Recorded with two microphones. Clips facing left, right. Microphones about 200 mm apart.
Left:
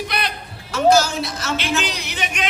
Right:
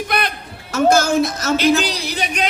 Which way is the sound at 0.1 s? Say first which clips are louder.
Right 4 dB; 50° right (ahead or behind).